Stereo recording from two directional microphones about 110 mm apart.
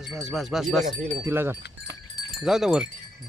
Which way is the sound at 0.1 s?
Centre (ahead or behind).